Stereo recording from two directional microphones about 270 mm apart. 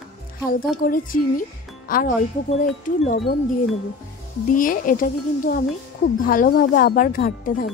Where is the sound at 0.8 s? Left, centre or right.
Left.